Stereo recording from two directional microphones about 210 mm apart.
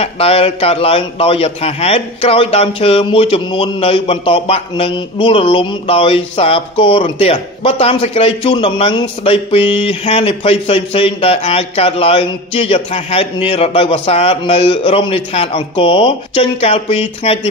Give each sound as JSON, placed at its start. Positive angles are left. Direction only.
{"t": 0.0, "sound": "a man's voice", "side_deg": 30}